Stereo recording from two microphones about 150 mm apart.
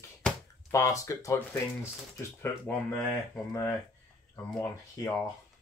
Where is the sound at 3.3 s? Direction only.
20° left (ahead or behind).